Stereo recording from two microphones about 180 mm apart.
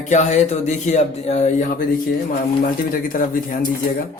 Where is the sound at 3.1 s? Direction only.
50° left (ahead or behind).